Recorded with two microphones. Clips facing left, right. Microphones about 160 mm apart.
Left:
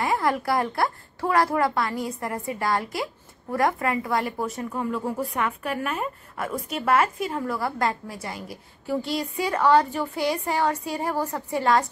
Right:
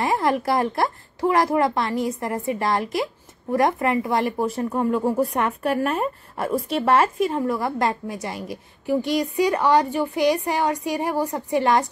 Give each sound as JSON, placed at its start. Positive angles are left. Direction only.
{"t": 0.0, "sound": "speech", "side_deg": -25}
{"t": 4.6, "sound": "speech", "side_deg": -40}